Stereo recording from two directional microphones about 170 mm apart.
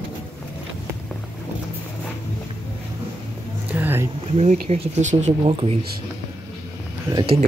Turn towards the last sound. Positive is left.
turn(degrees=-25)  # may be behind; listen again after turning